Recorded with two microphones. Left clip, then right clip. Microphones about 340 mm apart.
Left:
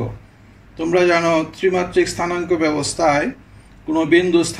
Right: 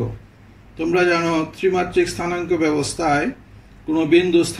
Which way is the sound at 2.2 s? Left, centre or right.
Left.